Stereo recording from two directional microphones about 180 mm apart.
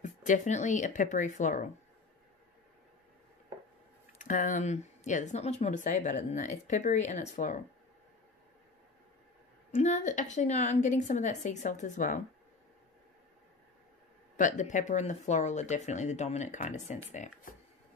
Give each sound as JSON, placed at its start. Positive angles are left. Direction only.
{"t": 0.0, "sound": "speech", "side_deg": 45}
{"t": 4.2, "sound": "speech", "side_deg": 45}
{"t": 9.7, "sound": "speech", "side_deg": 45}
{"t": 14.3, "sound": "speech", "side_deg": 45}